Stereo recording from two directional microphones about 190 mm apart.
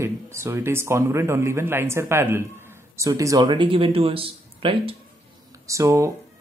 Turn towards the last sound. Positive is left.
turn(degrees=-15)  # may be behind; listen again after turning